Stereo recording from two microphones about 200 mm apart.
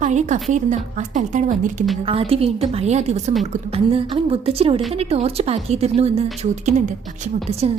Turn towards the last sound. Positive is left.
turn(degrees=-30)  # may be behind; listen again after turning